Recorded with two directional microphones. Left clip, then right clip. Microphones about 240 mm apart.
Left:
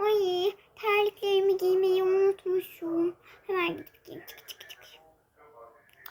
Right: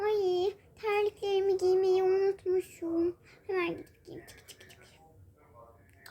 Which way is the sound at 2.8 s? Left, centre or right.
Centre.